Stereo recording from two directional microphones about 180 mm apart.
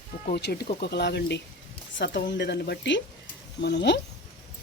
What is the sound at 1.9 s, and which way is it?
Speech, 80° left.